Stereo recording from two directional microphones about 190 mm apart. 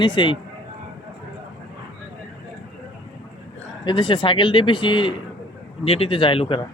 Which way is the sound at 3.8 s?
25° left (ahead or behind).